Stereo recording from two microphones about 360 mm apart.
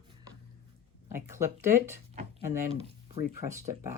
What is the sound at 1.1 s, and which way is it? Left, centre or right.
Speech, centre.